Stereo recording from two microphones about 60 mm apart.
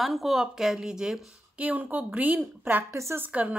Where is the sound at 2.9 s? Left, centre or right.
Right.